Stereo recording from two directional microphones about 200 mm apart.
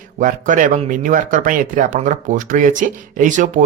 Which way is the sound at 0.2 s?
40° right (ahead or behind).